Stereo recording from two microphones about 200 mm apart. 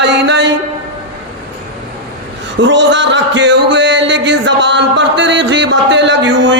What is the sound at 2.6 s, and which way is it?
A man's voice, 65° right (ahead or behind).